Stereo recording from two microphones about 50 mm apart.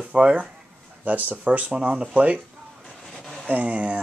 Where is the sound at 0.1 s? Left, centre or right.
Right.